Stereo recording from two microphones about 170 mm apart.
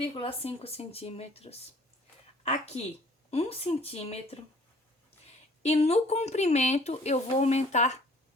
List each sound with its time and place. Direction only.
0.2 s speech: 35° left (ahead or behind)
5.6 s speech: 40° left (ahead or behind)